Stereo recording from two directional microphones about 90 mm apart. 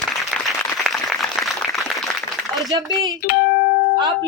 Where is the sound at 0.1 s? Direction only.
Centre (ahead or behind).